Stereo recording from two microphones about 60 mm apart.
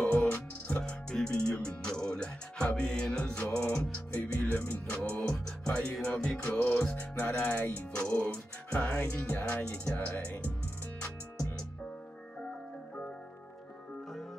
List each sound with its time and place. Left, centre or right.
0.0 s music: left
1.1 s music: centre